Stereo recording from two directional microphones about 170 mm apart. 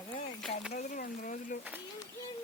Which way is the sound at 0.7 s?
50° left (ahead or behind).